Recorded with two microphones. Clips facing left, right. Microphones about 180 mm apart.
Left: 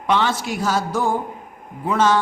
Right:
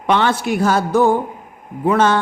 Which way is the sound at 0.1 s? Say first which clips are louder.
Right 4 dB; 60° right (ahead or behind).